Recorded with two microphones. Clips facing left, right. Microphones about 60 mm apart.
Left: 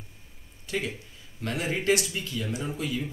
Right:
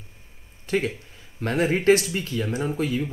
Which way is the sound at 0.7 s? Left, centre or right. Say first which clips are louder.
Right 7 dB; right.